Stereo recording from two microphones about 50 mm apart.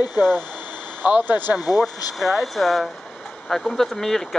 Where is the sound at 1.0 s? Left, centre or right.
Right.